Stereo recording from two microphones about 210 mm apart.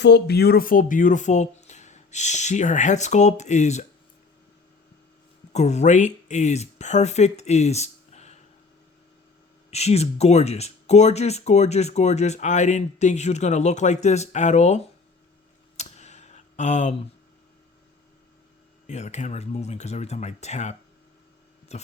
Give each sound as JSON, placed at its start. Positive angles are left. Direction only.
{"t": 0.0, "sound": "speech", "side_deg": 50}
{"t": 5.5, "sound": "speech", "side_deg": 35}
{"t": 9.6, "sound": "speech", "side_deg": 30}
{"t": 15.8, "sound": "a sound", "side_deg": 30}
{"t": 18.9, "sound": "speech", "side_deg": 35}